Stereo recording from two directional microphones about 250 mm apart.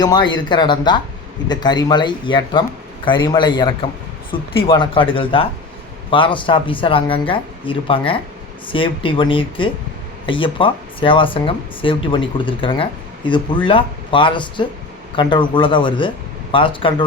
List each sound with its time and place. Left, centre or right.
0.0 s speech: centre